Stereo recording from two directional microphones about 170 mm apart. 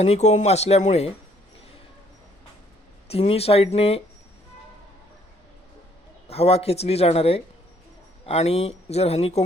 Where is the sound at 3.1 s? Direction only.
35° left (ahead or behind).